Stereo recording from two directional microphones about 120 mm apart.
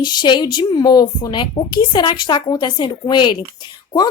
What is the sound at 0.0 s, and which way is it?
A woman's voice, 40° left (ahead or behind).